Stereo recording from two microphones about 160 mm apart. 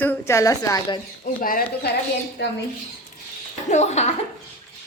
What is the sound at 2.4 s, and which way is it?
Speech, 90° left.